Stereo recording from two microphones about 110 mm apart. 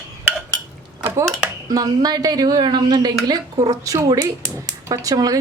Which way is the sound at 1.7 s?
35° right (ahead or behind).